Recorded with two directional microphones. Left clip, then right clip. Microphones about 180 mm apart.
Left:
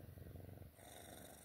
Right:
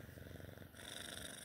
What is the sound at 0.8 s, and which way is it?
Purr, 15° left (ahead or behind).